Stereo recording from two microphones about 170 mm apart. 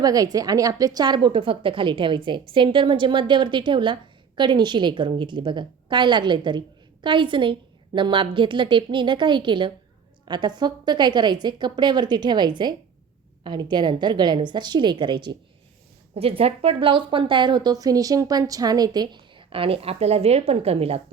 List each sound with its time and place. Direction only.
0.0 s a woman's voice: 20° right (ahead or behind)